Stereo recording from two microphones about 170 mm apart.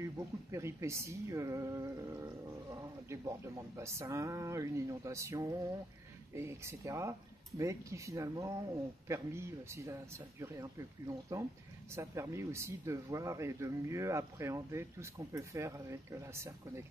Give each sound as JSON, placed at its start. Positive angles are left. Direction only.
{"t": 0.5, "sound": "speech", "side_deg": -15}